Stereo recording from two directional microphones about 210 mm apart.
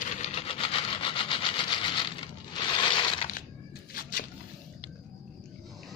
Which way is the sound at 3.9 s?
45° left (ahead or behind).